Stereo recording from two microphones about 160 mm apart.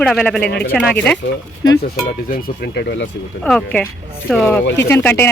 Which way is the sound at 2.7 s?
90° left.